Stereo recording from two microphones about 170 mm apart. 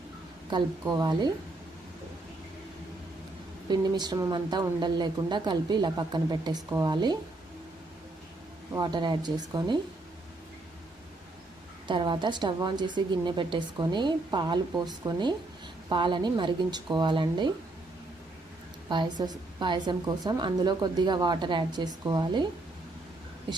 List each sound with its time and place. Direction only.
0.5 s a woman's voice: 25° right (ahead or behind)
3.7 s a woman's voice: 25° right (ahead or behind)
8.7 s a woman's voice: 25° right (ahead or behind)
11.9 s a woman's voice: 30° right (ahead or behind)
18.9 s a woman's voice: 25° right (ahead or behind)